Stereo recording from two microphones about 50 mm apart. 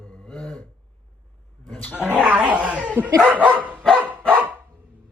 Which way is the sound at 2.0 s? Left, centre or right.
Right.